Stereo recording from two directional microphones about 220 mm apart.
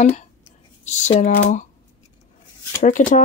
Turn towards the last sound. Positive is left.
turn(degrees=35)  # may be behind; listen again after turning